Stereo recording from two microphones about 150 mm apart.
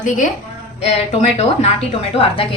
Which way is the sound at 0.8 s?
45° left (ahead or behind).